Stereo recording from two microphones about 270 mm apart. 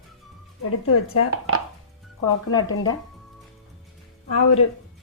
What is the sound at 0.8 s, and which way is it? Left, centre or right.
Speech, left.